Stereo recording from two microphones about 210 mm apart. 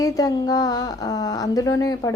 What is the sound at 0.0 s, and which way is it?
A woman's voice, 15° left (ahead or behind).